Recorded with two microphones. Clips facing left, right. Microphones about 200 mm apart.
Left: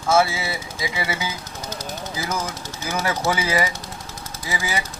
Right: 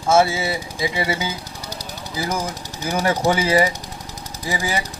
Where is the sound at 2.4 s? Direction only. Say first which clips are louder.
Right 3 dB; 35° right (ahead or behind).